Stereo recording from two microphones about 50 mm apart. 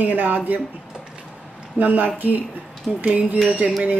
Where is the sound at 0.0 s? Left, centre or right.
Right.